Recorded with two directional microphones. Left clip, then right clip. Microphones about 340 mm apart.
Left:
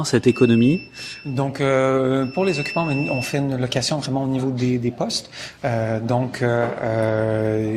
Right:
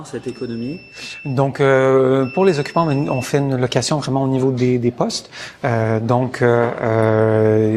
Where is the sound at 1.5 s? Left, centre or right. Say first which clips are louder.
Right 5 dB; right.